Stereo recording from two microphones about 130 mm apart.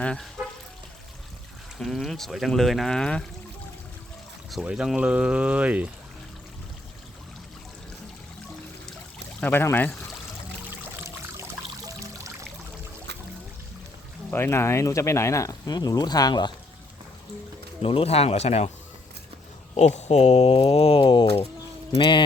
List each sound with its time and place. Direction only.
0.0 s speech: 5° left (ahead or behind)
1.8 s speech: 5° left (ahead or behind)
4.5 s speech: 5° right (ahead or behind)
9.4 s speech: 15° left (ahead or behind)
11.9 s trickle: 25° right (ahead or behind)
14.3 s speech: 15° left (ahead or behind); by 16.5 s 30° left (ahead or behind)
17.8 s speech: 50° left (ahead or behind)
19.7 s speech: 60° left (ahead or behind); by 22.2 s 40° left (ahead or behind)